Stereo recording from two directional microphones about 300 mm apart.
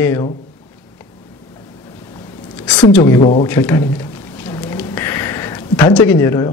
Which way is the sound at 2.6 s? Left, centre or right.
Centre.